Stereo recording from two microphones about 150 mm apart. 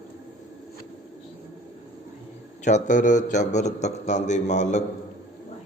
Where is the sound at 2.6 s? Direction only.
55° left (ahead or behind).